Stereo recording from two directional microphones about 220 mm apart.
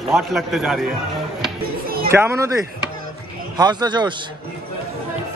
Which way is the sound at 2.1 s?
15° right (ahead or behind).